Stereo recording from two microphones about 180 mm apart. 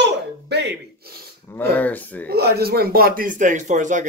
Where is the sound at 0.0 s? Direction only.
70° right (ahead or behind).